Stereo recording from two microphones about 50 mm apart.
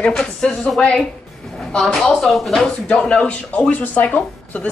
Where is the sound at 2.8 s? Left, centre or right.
Centre.